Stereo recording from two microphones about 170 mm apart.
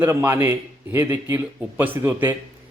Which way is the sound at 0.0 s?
15° right (ahead or behind).